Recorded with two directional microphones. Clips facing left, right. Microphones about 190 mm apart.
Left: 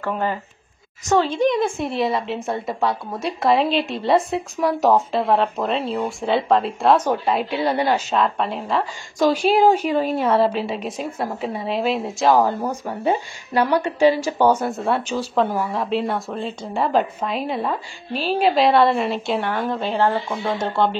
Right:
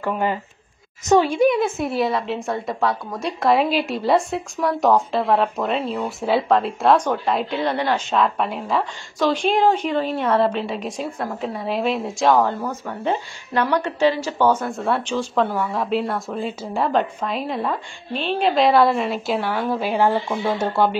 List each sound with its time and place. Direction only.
0.0 s a woman's voice: 15° right (ahead or behind); by 8.2 s 10° left (ahead or behind)
8.2 s a woman's voice: centre (ahead or behind)
9.2 s a woman's voice: 10° left (ahead or behind); by 21.0 s 10° right (ahead or behind)